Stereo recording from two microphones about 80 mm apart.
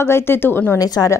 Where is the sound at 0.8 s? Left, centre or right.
Left.